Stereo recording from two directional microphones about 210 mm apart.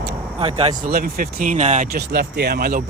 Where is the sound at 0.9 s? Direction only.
45° right (ahead or behind).